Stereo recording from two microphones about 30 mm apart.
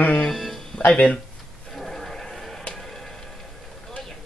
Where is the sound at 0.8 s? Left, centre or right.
Left.